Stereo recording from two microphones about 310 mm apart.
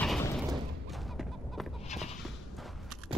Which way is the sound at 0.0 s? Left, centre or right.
Centre.